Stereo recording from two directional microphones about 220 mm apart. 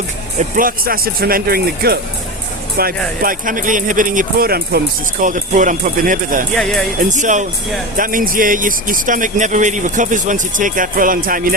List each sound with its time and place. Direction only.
0.5 s speech: 40° right (ahead or behind)
3.2 s a man's voice: 40° right (ahead or behind)
6.5 s speech: centre (ahead or behind)
7.0 s a man's voice: 35° right (ahead or behind)